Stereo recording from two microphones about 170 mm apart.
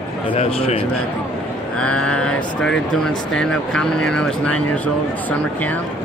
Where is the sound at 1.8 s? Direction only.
5° left (ahead or behind).